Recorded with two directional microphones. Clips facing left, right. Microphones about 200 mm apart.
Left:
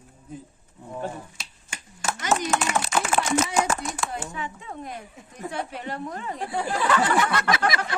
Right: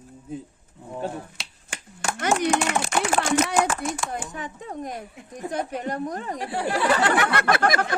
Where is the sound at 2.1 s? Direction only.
60° right (ahead or behind).